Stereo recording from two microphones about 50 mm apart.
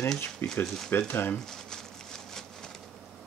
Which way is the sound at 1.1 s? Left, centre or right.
Left.